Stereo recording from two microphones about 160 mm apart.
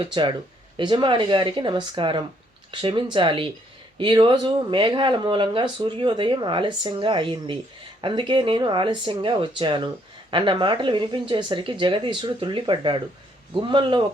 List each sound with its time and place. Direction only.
0.0 s speech: 30° right (ahead or behind)